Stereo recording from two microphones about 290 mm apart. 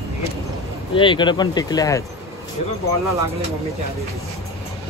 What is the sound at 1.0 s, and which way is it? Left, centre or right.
Speech, centre.